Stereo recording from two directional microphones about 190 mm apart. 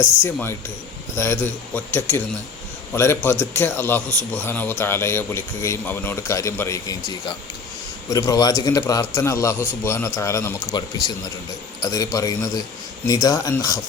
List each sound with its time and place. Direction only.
0.3 s a man's voice: 10° left (ahead or behind)